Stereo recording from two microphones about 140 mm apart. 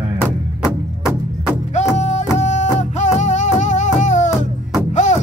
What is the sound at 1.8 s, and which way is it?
Music, 55° left (ahead or behind).